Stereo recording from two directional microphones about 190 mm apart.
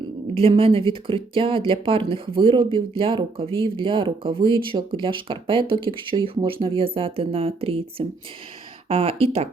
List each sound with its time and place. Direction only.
0.3 s speech: 30° right (ahead or behind)